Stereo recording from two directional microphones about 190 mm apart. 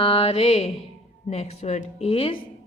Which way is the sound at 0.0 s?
30° left (ahead or behind).